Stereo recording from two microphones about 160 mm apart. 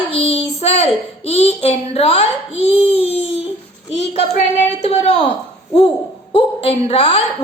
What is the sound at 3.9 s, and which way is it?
Child singing, 90° left.